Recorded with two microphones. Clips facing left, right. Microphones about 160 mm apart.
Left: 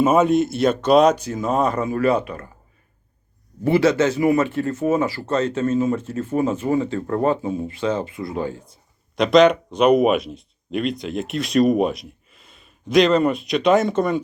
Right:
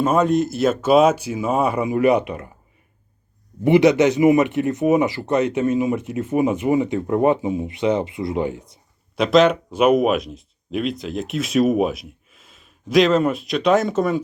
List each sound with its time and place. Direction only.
0.0 s speech: 5° left (ahead or behind); by 2.5 s 20° right (ahead or behind)
3.6 s speech: 20° right (ahead or behind)
9.1 s speech: centre (ahead or behind)